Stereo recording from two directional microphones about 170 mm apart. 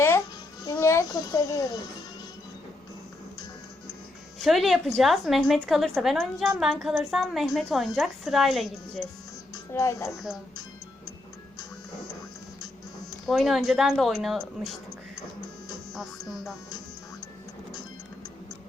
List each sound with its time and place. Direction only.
0.6 s a child's voice: 20° left (ahead or behind)
4.4 s a woman's voice: centre (ahead or behind)
9.7 s a child's voice: 15° left (ahead or behind)
13.1 s speech: centre (ahead or behind)
16.0 s music: centre (ahead or behind)